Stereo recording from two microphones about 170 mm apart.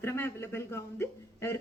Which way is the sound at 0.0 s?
15° left (ahead or behind).